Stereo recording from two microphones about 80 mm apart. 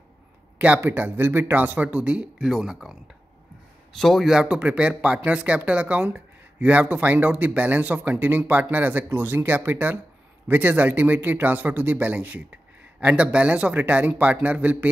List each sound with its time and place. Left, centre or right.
0.8 s speech: right; by 3.0 s centre
4.0 s a man's voice: centre
4.3 s speech: centre